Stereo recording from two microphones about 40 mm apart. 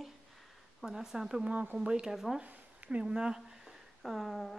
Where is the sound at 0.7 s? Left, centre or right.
Centre.